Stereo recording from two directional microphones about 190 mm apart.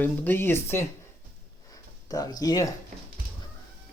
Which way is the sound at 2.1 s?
20° left (ahead or behind).